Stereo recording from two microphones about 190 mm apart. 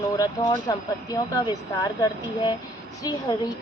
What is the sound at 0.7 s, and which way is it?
Speech, 20° left (ahead or behind).